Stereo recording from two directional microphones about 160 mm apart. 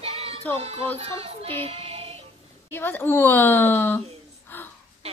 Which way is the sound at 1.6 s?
40° right (ahead or behind).